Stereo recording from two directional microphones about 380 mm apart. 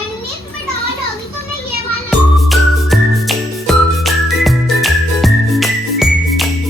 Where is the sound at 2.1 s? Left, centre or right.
Centre.